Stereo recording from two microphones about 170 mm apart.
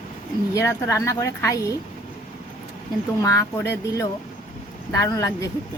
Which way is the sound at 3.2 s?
15° left (ahead or behind).